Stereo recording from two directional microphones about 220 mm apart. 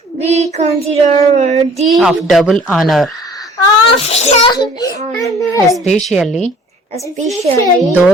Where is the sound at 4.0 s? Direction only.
30° left (ahead or behind).